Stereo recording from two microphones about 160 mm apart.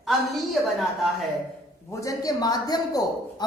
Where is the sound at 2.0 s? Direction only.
20° left (ahead or behind).